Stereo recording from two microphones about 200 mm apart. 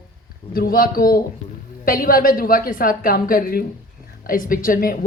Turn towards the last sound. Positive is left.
turn(degrees=45)  # may be behind; listen again after turning